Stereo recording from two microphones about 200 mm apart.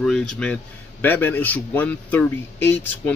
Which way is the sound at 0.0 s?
5° left (ahead or behind).